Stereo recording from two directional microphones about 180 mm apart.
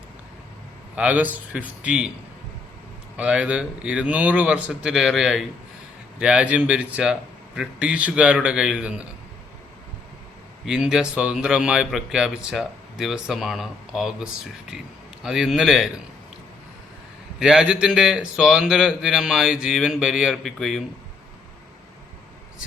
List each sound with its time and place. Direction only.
0.9 s a man's voice: 10° right (ahead or behind)
3.2 s speech: 5° right (ahead or behind)
10.7 s speech: 5° right (ahead or behind)
17.4 s speech: 5° right (ahead or behind)